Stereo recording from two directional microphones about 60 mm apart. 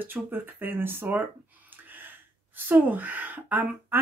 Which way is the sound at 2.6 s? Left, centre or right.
Right.